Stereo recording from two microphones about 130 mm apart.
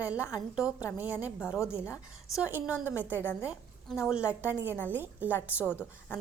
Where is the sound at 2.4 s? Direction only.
15° right (ahead or behind).